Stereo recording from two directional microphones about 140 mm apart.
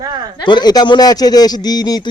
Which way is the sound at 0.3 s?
30° left (ahead or behind).